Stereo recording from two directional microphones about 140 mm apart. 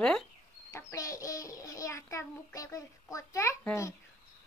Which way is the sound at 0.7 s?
20° left (ahead or behind).